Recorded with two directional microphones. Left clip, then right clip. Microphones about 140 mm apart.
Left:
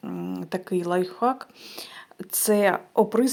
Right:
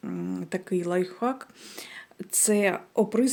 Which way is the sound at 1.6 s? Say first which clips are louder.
Left 3 dB; 30° right (ahead or behind).